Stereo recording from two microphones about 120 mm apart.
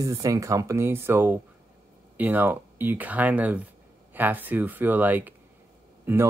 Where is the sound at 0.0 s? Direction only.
25° right (ahead or behind).